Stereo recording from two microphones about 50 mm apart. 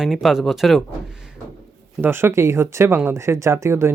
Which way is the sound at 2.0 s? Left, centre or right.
Right.